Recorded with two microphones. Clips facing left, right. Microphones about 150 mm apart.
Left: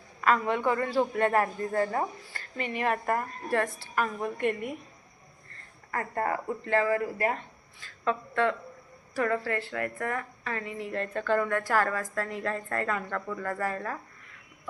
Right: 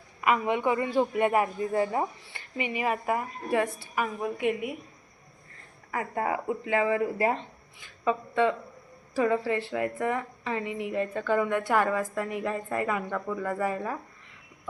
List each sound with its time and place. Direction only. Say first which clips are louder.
0.2 s a woman's voice: even; 10° right (ahead or behind)
5.9 s a woman's voice: right 1 dB; 10° right (ahead or behind)